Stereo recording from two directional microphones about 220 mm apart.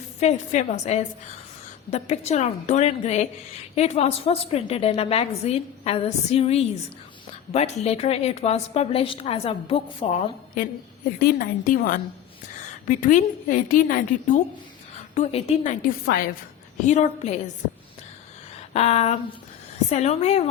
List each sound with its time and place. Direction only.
0.2 s a woman's voice: 30° left (ahead or behind)
11.2 s a woman's voice: 40° left (ahead or behind)
18.7 s a woman's voice: 30° left (ahead or behind)